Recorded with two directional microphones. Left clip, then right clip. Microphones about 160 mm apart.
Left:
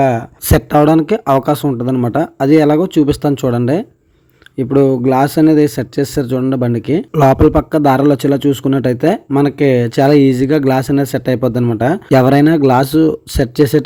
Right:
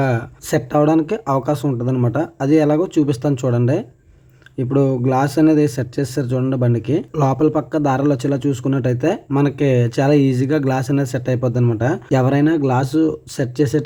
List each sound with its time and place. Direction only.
0.0 s speech: 25° left (ahead or behind)
0.4 s speech: 35° left (ahead or behind)